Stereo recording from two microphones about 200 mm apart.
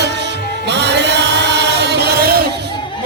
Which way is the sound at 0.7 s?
60° right (ahead or behind).